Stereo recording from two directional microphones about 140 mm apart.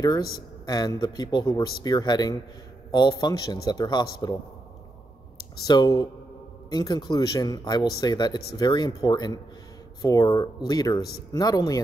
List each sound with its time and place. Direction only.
0.7 s speech: 25° left (ahead or behind)
5.6 s speech: 30° left (ahead or behind)